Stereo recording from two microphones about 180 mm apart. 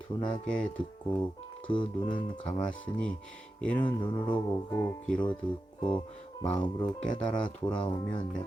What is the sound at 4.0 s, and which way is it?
Speech, 25° left (ahead or behind).